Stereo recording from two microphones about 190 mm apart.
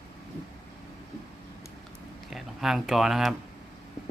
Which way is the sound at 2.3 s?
Centre (ahead or behind).